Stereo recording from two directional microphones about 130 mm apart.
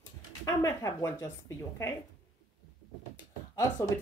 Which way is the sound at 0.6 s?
25° left (ahead or behind).